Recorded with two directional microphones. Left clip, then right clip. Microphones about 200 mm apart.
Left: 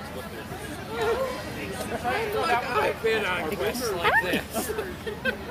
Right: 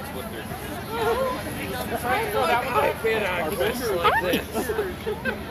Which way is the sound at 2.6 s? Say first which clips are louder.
Right 2 dB; 45° left (ahead or behind).